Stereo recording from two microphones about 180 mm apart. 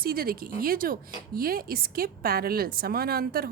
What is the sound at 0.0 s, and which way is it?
Speech, 55° right (ahead or behind).